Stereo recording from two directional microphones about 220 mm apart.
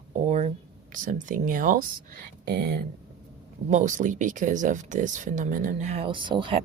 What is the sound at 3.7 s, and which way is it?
Speech, 35° right (ahead or behind).